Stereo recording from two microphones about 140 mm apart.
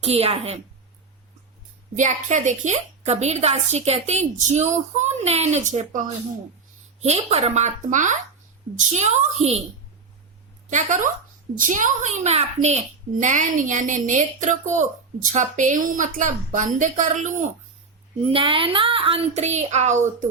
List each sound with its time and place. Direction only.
0.0 s a woman's voice: 45° right (ahead or behind)
2.0 s a child's voice: 60° right (ahead or behind)
7.0 s a child's voice: 50° right (ahead or behind)
10.7 s a child's voice: 60° right (ahead or behind)
18.2 s a woman's voice: 40° right (ahead or behind); by 20.2 s 60° right (ahead or behind)